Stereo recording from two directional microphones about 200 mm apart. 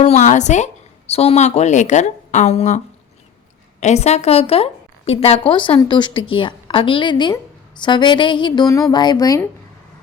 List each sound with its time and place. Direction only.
0.0 s a woman's voice: 35° left (ahead or behind); by 9.4 s 20° left (ahead or behind)